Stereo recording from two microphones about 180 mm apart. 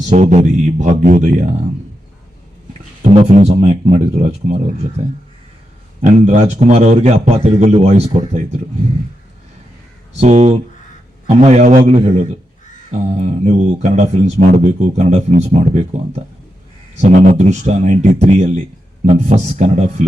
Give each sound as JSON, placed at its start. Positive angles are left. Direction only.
{"t": 0.1, "sound": "speech", "side_deg": -40}
{"t": 3.0, "sound": "speech", "side_deg": -35}
{"t": 6.0, "sound": "speech", "side_deg": -40}
{"t": 10.2, "sound": "speech", "side_deg": -40}
{"t": 13.4, "sound": "speech", "side_deg": -40}